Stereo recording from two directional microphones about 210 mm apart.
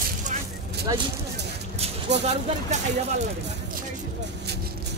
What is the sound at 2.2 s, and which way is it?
Speech, 35° right (ahead or behind).